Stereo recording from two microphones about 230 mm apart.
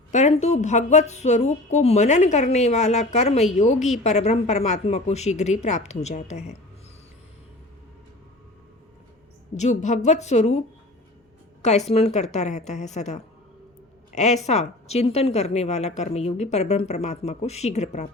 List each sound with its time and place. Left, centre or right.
0.1 s a woman's voice: left
9.6 s a woman's voice: left
11.6 s a woman's voice: left